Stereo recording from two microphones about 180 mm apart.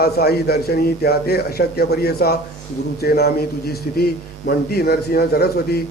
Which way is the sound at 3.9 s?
50° left (ahead or behind).